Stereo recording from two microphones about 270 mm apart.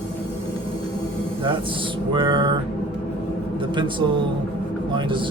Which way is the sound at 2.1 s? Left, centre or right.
Centre.